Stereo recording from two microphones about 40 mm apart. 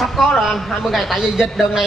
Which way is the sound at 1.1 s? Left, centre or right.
Centre.